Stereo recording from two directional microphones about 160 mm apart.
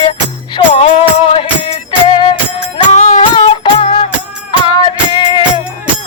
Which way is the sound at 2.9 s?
45° left (ahead or behind).